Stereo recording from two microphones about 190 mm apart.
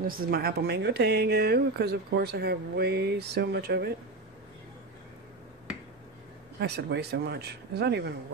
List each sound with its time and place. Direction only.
0.0 s speech: 50° right (ahead or behind)
6.6 s speech: 60° right (ahead or behind)